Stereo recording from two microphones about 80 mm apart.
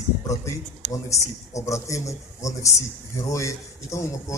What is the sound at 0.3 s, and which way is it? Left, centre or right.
Speech, left.